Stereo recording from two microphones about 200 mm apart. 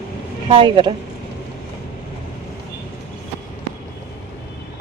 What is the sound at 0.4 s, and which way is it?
Speech, 25° right (ahead or behind).